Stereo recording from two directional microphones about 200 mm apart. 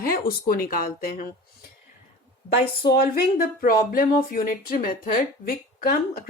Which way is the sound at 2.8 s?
50° left (ahead or behind).